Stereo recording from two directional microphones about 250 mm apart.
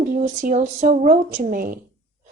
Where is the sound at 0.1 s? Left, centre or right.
Right.